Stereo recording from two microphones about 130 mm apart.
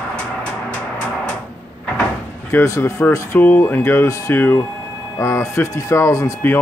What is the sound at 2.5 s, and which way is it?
Speech, 20° left (ahead or behind).